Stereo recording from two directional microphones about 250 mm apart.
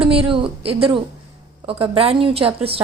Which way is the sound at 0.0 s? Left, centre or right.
Right.